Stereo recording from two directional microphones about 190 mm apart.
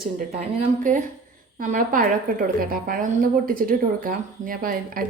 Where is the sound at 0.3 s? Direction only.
40° right (ahead or behind).